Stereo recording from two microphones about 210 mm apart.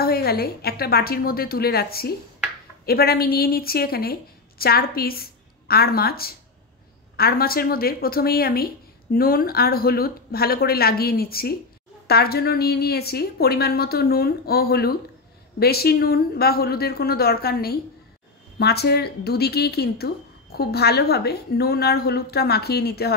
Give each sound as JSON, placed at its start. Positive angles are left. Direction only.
{"t": 0.0, "sound": "speech", "side_deg": 45}